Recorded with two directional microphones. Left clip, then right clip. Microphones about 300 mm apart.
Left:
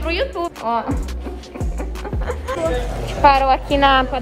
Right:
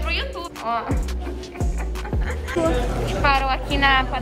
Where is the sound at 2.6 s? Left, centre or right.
Left.